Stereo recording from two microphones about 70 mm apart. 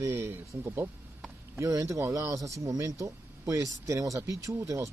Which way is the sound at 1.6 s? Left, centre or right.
Right.